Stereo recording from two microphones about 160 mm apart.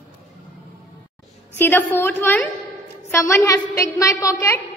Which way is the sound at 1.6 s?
15° left (ahead or behind).